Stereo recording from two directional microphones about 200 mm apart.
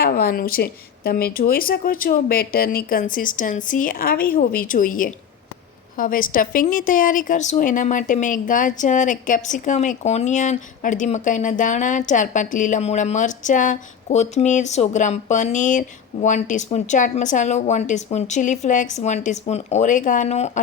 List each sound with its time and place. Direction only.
0.0 s a woman's voice: 50° left (ahead or behind); by 20.6 s 35° left (ahead or behind)